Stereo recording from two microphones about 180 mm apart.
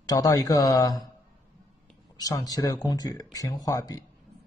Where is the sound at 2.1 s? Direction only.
20° left (ahead or behind).